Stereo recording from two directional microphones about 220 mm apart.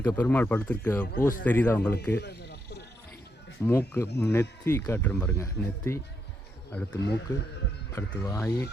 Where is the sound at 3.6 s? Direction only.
10° left (ahead or behind).